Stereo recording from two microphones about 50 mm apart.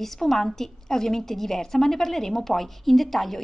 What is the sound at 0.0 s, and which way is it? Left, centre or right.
A woman's voice, centre.